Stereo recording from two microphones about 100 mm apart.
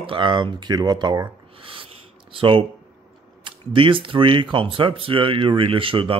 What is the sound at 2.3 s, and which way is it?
Speech, 60° right (ahead or behind).